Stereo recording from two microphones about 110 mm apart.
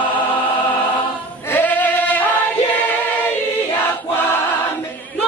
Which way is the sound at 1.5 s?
15° left (ahead or behind).